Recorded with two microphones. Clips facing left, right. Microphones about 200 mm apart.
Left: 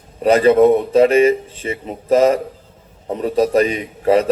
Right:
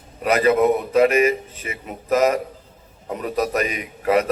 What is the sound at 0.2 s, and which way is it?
A man's voice, 30° left (ahead or behind).